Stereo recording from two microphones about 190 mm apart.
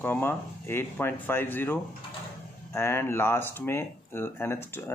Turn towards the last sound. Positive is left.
turn(degrees=10)  # may be behind; listen again after turning